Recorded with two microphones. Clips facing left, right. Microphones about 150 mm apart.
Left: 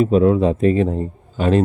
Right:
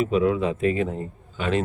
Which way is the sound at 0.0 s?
40° left (ahead or behind).